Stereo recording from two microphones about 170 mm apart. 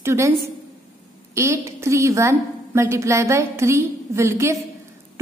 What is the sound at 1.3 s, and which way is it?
A woman's voice, 15° right (ahead or behind).